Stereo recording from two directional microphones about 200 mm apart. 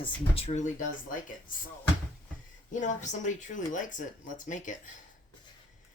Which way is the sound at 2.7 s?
40° left (ahead or behind).